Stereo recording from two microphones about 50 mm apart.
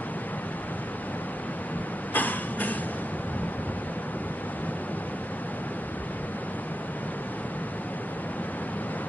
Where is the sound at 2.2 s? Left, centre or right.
Left.